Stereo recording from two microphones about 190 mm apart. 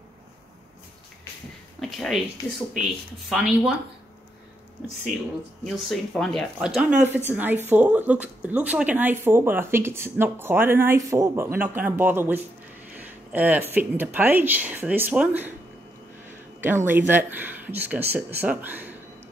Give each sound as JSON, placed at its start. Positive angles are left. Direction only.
{"t": 1.8, "sound": "a sound", "side_deg": 0}
{"t": 2.8, "sound": "speech", "side_deg": 0}
{"t": 5.9, "sound": "speech", "side_deg": 0}